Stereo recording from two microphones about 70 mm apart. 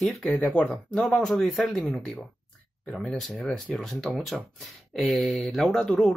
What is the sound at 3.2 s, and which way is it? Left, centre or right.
Speech, centre.